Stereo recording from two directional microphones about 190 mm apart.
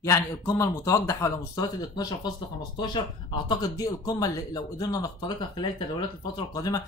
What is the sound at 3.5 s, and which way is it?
Speech, 20° left (ahead or behind).